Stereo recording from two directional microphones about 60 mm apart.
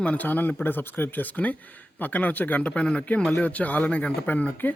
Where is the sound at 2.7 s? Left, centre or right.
Centre.